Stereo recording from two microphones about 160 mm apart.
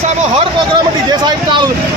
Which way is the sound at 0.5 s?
30° right (ahead or behind).